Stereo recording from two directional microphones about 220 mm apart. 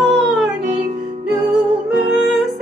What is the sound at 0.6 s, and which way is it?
Music, 35° right (ahead or behind).